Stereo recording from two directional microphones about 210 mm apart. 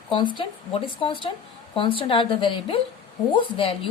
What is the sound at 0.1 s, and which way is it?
A woman's voice, 20° left (ahead or behind).